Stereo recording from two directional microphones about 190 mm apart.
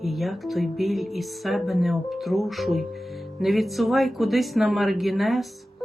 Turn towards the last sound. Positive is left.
turn(degrees=0)  # may be behind; listen again after turning